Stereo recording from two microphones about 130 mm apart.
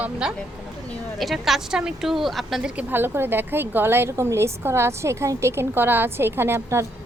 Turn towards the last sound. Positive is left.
turn(degrees=-20)  # may be behind; listen again after turning